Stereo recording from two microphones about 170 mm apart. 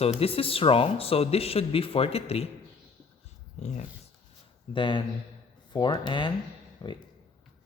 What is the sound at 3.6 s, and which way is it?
Speech, 45° left (ahead or behind).